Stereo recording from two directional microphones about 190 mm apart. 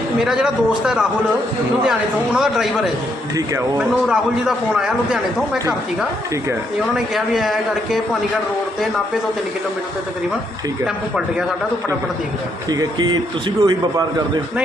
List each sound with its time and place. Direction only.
0.2 s a man's voice: 5° right (ahead or behind)
6.9 s a man's voice: centre (ahead or behind)
10.8 s a man's voice: 5° right (ahead or behind)
12.7 s speech: 20° right (ahead or behind)